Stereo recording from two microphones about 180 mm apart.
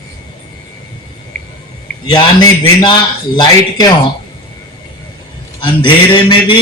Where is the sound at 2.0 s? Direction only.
25° left (ahead or behind).